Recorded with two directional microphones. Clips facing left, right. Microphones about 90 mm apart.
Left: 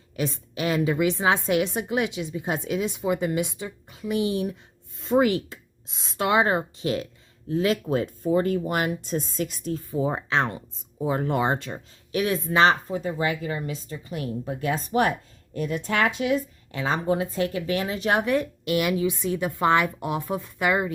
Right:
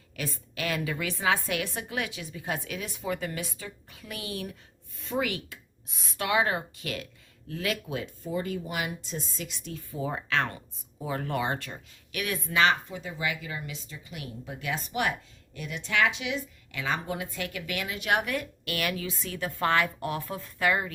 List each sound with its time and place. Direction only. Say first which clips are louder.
0.2 s speech: left 7 dB; 20° left (ahead or behind)
4.9 s speech: left 10 dB; 35° left (ahead or behind)
7.9 s speech: left 10 dB; 40° left (ahead or behind); by 20.9 s 20° left (ahead or behind)